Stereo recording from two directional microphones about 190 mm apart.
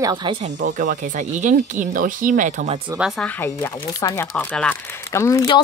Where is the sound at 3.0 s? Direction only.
5° right (ahead or behind).